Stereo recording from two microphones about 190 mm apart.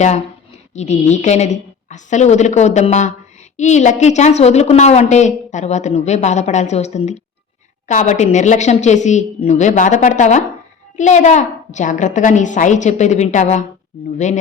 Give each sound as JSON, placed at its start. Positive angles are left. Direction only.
{"t": 0.7, "sound": "a woman's voice", "side_deg": 35}